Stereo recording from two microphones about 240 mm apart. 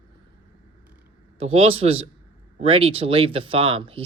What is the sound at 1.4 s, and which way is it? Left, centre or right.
Speech, right.